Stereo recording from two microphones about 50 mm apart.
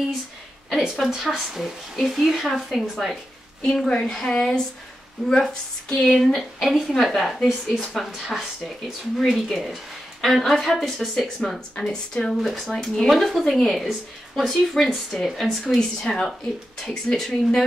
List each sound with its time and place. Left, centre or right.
0.7 s speech: centre
3.6 s a woman's voice: centre
6.3 s speech: centre
11.4 s a woman's voice: left